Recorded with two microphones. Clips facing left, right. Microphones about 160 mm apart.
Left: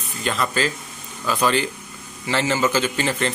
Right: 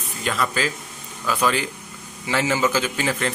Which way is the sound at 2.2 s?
10° right (ahead or behind).